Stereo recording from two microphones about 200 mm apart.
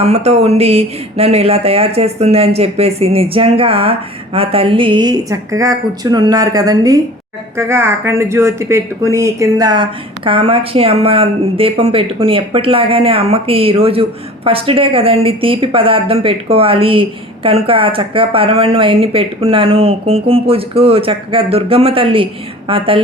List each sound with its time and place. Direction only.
0.0 s speech: 30° right (ahead or behind)